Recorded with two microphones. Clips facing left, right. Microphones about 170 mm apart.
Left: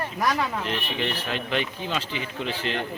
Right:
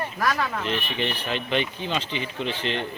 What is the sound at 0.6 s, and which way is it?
Speech, 5° left (ahead or behind).